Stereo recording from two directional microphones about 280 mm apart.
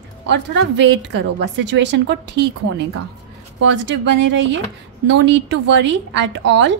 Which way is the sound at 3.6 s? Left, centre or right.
Right.